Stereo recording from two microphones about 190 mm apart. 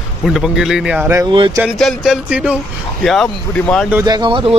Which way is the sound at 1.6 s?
Centre (ahead or behind).